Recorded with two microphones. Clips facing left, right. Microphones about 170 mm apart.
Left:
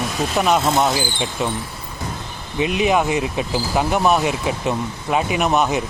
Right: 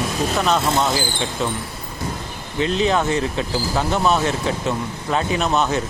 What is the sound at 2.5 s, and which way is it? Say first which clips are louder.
Speech: left 1 dB; 15° left (ahead or behind).